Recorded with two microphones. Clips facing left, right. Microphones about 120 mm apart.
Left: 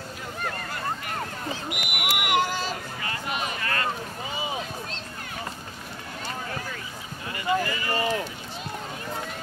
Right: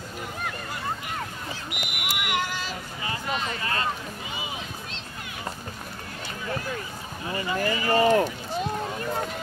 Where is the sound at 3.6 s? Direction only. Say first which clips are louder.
Even; 20° right (ahead or behind).